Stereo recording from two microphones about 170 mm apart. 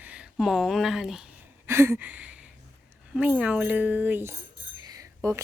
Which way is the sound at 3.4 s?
5° right (ahead or behind).